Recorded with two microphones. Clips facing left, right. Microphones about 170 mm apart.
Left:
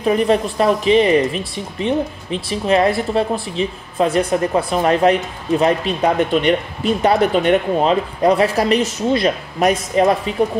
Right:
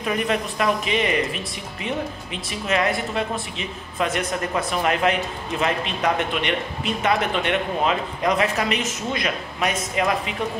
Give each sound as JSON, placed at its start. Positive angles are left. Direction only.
{"t": 0.0, "sound": "speech", "side_deg": 35}